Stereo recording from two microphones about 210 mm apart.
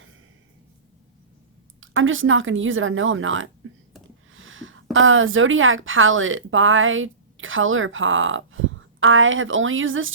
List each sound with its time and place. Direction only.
1.8 s speech: 70° right (ahead or behind)
4.3 s a sound: 70° right (ahead or behind)
4.9 s speech: 70° right (ahead or behind)